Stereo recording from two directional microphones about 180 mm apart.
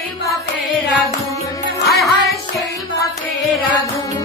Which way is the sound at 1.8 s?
Centre (ahead or behind).